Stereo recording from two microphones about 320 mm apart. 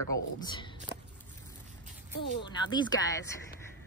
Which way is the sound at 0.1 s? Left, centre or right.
Centre.